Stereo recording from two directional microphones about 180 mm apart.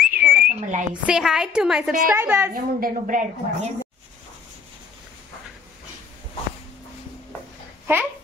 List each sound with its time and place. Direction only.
0.1 s whistling: 50° right (ahead or behind)
1.0 s a woman's voice: 5° right (ahead or behind)
2.5 s a woman's voice: 50° right (ahead or behind)
7.8 s babbling: 10° right (ahead or behind)